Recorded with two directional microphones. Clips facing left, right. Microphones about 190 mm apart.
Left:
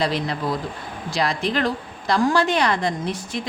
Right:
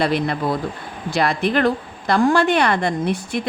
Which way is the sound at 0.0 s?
55° right (ahead or behind).